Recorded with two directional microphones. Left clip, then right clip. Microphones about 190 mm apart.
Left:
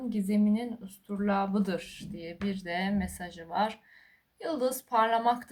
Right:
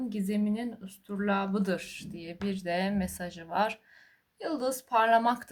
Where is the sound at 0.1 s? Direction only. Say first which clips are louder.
Left 3 dB; 35° right (ahead or behind).